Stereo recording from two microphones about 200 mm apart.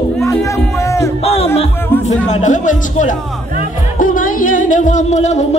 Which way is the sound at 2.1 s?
35° left (ahead or behind).